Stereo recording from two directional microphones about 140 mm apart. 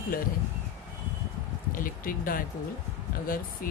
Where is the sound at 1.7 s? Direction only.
80° left.